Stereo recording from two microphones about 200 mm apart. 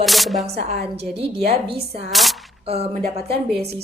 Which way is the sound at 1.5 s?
50° right (ahead or behind).